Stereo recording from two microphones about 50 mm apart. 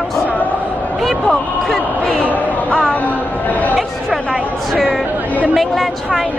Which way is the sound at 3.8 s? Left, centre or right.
Centre.